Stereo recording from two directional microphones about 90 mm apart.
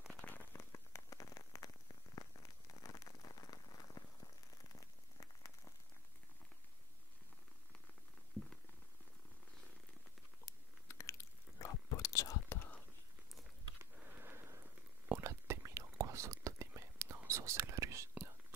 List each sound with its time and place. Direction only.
0.1 s rain on surface: 15° left (ahead or behind); by 4.0 s 45° left (ahead or behind)
8.4 s a sound: 20° left (ahead or behind)
10.4 s chewing: 35° left (ahead or behind)
12.5 s whispering: 20° left (ahead or behind)
14.2 s a sound: 25° right (ahead or behind)
15.1 s whispering: 30° right (ahead or behind)